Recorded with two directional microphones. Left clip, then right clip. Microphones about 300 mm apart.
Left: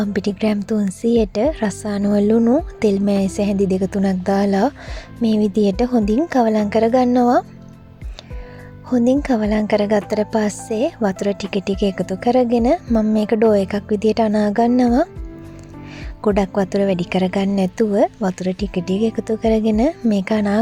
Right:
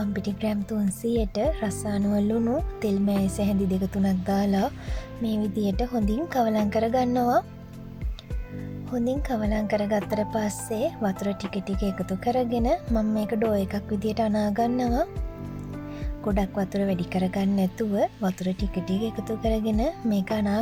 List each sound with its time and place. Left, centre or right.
0.0 s a woman's voice: left
8.9 s a woman's voice: left
16.2 s a woman's voice: left